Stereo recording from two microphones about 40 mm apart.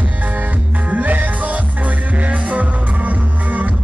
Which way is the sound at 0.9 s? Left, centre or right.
Right.